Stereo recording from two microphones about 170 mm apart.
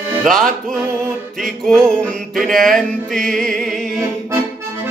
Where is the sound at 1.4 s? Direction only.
Centre (ahead or behind).